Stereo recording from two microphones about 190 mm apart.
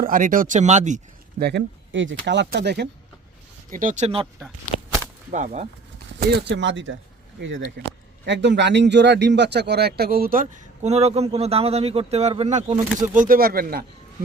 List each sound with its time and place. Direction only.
0.0 s a man's voice: 45° right (ahead or behind)
1.4 s speech: 60° right (ahead or behind)
3.7 s speech: 45° right (ahead or behind)
5.3 s speech: 40° right (ahead or behind)
6.1 s a man's voice: 65° right (ahead or behind); by 12.6 s 35° right (ahead or behind)
13.1 s a man's voice: 50° right (ahead or behind)